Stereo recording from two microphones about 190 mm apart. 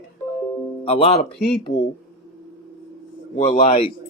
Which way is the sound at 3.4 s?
30° left (ahead or behind).